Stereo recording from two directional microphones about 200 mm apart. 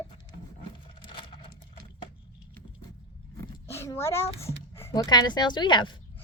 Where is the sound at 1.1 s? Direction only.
25° left (ahead or behind).